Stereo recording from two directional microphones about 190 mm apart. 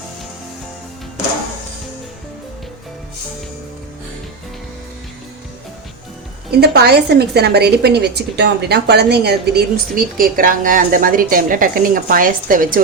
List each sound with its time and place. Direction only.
6.6 s a woman's voice: 60° right (ahead or behind)